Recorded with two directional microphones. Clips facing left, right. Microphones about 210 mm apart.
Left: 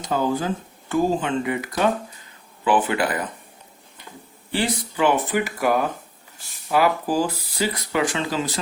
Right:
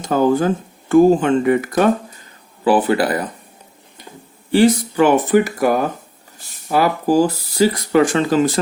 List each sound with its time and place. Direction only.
0.0 s speech: 50° right (ahead or behind)
2.6 s speech: 40° right (ahead or behind)
4.5 s speech: 45° right (ahead or behind)